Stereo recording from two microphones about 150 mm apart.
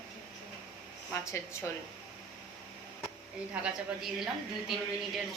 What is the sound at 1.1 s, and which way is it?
Speech, 15° left (ahead or behind).